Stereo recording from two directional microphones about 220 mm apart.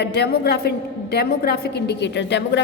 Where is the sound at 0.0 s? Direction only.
50° left (ahead or behind).